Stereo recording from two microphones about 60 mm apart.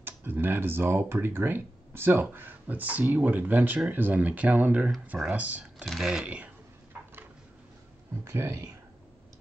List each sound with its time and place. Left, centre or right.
0.0 s speech: right
5.9 s speech: centre
6.2 s speech: right
8.2 s speech: right